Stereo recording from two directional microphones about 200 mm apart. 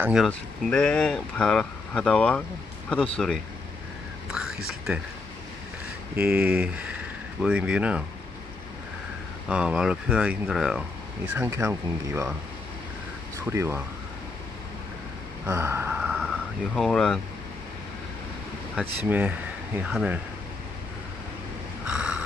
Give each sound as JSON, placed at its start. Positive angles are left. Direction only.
{"t": 0.0, "sound": "speech", "side_deg": -5}
{"t": 0.3, "sound": "speech", "side_deg": 5}
{"t": 4.3, "sound": "whispering", "side_deg": -5}
{"t": 6.2, "sound": "speech", "side_deg": -5}
{"t": 9.5, "sound": "speech", "side_deg": -5}
{"t": 13.5, "sound": "speech", "side_deg": -10}
{"t": 15.4, "sound": "gasp", "side_deg": -10}
{"t": 16.7, "sound": "speech", "side_deg": 5}
{"t": 18.8, "sound": "speech", "side_deg": -5}
{"t": 21.8, "sound": "a sound", "side_deg": -5}